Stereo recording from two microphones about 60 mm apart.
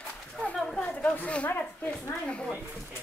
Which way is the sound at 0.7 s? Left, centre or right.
Centre.